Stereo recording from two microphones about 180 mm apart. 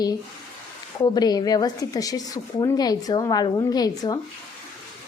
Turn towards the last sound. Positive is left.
turn(degrees=20)  # may be behind; listen again after turning